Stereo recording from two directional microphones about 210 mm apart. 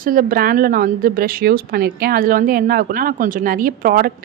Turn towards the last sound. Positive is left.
turn(degrees=-45)  # may be behind; listen again after turning